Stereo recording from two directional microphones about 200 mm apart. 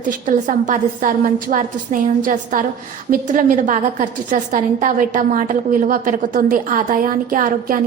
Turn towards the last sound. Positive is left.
turn(degrees=-45)  # may be behind; listen again after turning